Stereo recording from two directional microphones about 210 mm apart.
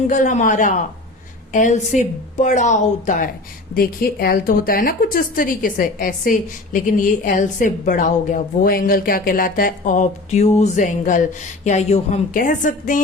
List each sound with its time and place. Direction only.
0.1 s a woman's voice: 35° left (ahead or behind)